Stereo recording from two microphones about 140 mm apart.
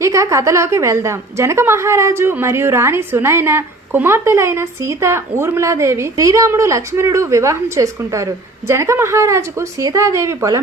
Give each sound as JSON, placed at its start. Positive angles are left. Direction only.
{"t": 0.0, "sound": "a woman's voice", "side_deg": -20}